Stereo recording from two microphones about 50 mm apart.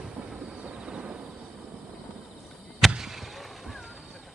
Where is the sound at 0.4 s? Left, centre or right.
Right.